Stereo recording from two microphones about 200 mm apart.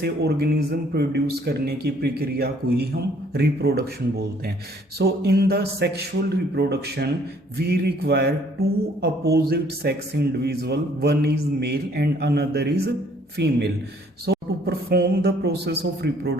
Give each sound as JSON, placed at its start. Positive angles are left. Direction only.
{"t": 0.0, "sound": "a woman's voice", "side_deg": -55}